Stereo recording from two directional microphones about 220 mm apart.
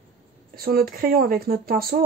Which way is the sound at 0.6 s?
40° right (ahead or behind).